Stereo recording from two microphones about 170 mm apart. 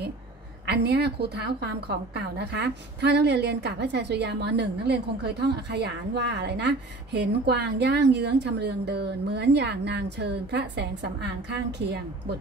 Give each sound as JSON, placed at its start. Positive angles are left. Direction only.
{"t": 0.7, "sound": "a woman's voice", "side_deg": -75}